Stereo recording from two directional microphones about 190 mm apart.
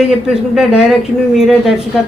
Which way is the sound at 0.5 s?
5° right (ahead or behind).